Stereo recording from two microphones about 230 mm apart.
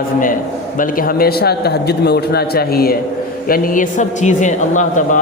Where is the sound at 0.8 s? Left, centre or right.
Left.